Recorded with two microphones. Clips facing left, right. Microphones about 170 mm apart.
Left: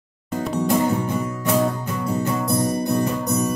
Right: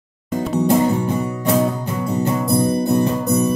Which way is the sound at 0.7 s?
25° right (ahead or behind).